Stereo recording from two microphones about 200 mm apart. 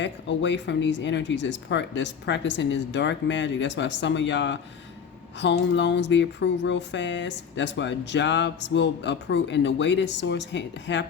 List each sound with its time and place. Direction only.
0.0 s speech: 65° left (ahead or behind)